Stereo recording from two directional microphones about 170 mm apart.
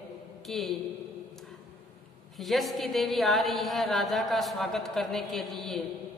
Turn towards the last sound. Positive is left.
turn(degrees=0)  # may be behind; listen again after turning